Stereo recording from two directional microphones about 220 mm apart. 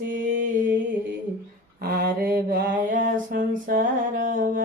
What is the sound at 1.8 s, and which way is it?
Mantra, 45° right (ahead or behind).